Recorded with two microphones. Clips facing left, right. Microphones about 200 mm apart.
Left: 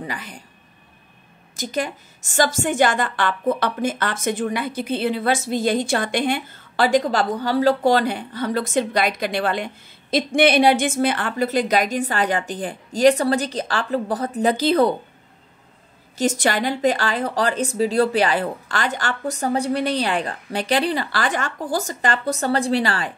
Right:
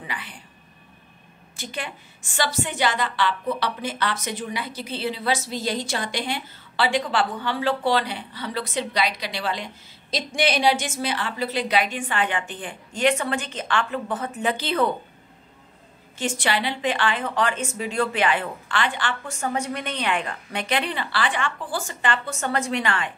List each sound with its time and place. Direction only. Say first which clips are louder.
0.0 s speech: left 5 dB; 40° left (ahead or behind)
1.6 s a woman's voice: left 8 dB; 40° left (ahead or behind)
16.2 s speech: left 5 dB; 40° left (ahead or behind)